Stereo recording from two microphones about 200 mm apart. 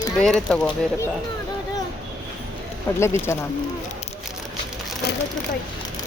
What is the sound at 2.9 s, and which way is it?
Speech, 15° left (ahead or behind).